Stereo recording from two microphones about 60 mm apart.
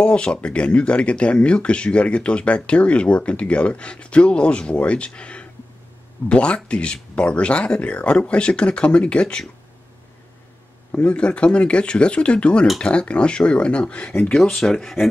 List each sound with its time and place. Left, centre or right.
0.0 s speech: centre
10.9 s speech: left
14.5 s speech: centre